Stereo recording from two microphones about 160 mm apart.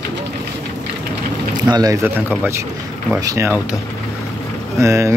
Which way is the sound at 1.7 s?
25° right (ahead or behind).